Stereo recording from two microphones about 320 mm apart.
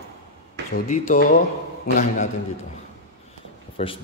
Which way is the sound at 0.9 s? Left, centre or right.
Left.